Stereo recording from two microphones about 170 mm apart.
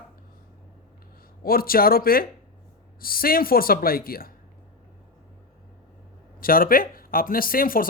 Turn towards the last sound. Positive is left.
turn(degrees=55)  # may be behind; listen again after turning